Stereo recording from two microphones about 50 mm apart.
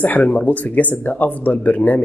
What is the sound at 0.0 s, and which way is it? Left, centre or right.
Speech, left.